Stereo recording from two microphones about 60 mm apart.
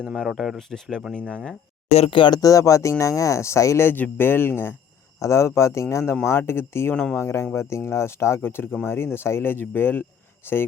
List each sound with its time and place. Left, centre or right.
0.3 s speech: centre
0.7 s speech: centre
2.4 s speech: left
3.8 s speech: left
5.2 s speech: left
6.9 s speech: left
7.2 s speech: left